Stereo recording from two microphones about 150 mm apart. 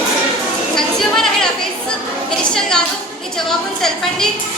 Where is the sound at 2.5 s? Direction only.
5° left (ahead or behind).